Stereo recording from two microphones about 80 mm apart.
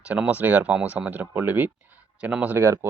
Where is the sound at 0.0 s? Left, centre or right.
Centre.